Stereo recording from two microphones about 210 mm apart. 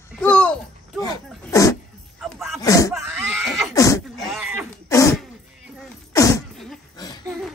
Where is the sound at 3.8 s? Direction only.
15° left (ahead or behind).